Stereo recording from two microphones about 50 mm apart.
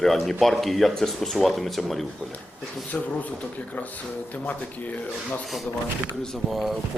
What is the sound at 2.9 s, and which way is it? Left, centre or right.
A man's voice, left.